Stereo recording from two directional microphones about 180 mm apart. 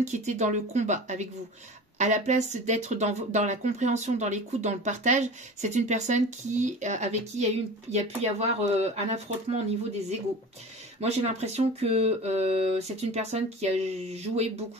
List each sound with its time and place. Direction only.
0.0 s speech: 40° right (ahead or behind)
11.0 s speech: 35° right (ahead or behind)